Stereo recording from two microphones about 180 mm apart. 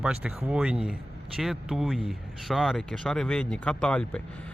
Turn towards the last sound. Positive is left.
turn(degrees=5)  # may be behind; listen again after turning